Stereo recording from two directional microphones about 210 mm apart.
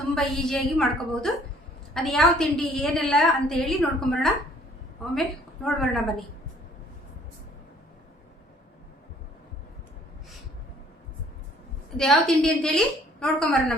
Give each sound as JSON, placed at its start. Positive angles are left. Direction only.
{"t": 0.1, "sound": "a woman's voice", "side_deg": 0}
{"t": 5.6, "sound": "a woman's voice", "side_deg": 0}
{"t": 11.9, "sound": "a woman's voice", "side_deg": 0}